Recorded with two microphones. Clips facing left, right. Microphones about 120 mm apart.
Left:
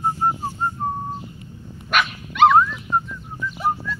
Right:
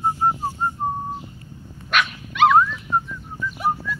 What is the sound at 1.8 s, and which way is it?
Dog, centre (ahead or behind).